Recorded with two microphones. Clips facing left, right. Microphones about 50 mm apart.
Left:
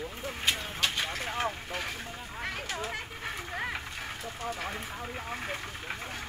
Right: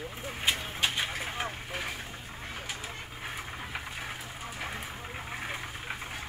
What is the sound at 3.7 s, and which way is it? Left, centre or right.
Vehicle, centre.